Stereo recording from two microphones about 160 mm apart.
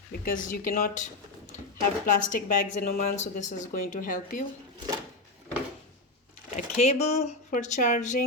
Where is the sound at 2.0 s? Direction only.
55° left (ahead or behind).